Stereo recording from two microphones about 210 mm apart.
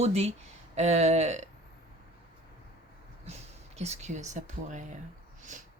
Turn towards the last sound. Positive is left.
turn(degrees=-35)  # may be behind; listen again after turning